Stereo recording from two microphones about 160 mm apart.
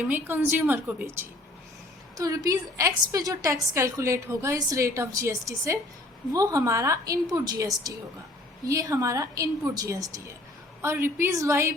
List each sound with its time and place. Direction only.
0.1 s a woman's voice: 10° right (ahead or behind)